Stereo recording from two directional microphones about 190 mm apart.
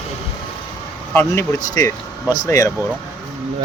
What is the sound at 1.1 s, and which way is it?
Speech, 10° left (ahead or behind).